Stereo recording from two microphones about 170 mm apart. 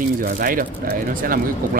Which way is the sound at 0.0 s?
55° right (ahead or behind).